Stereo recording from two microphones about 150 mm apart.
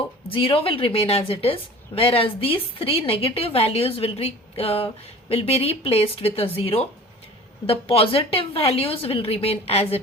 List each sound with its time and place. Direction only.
0.3 s a woman's voice: 35° left (ahead or behind)